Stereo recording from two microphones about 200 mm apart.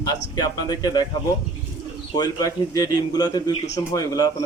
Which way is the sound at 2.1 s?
20° left (ahead or behind).